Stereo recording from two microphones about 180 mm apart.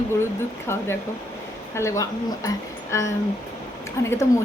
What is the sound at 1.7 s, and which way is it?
A woman's voice, 15° left (ahead or behind).